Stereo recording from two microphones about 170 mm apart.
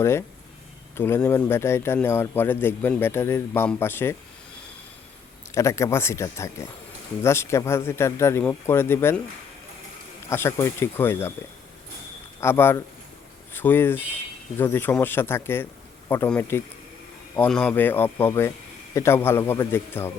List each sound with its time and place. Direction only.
0.0 s speech: 15° left (ahead or behind)
5.5 s speech: 15° left (ahead or behind)
10.2 s speech: 15° left (ahead or behind)
12.4 s speech: 15° left (ahead or behind)